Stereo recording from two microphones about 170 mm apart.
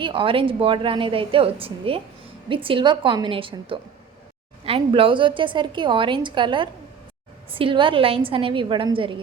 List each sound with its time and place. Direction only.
0.0 s a woman's voice: 30° right (ahead or behind)